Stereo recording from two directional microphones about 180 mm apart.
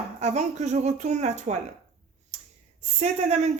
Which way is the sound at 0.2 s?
40° right (ahead or behind).